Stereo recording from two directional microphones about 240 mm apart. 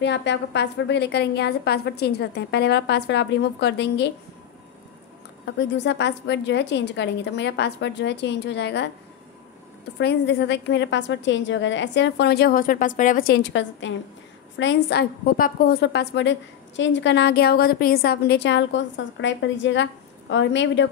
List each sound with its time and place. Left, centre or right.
0.0 s a woman's voice: left
5.4 s a woman's voice: left
9.9 s a woman's voice: left